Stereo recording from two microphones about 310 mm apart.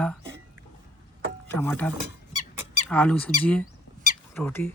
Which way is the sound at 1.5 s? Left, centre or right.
Centre.